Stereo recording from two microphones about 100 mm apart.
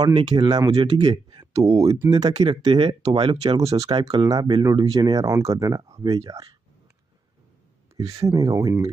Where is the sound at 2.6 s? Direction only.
60° right (ahead or behind).